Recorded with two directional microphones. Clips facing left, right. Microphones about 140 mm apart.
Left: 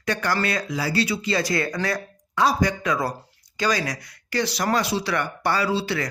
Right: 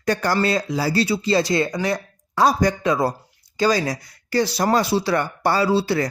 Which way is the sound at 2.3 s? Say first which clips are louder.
Right 3 dB; 40° right (ahead or behind).